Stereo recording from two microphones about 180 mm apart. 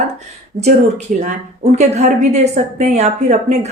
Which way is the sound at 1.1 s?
40° right (ahead or behind).